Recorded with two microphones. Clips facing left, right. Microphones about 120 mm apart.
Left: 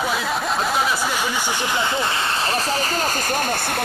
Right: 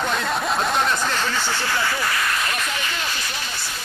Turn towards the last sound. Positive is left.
turn(degrees=55)  # may be behind; listen again after turning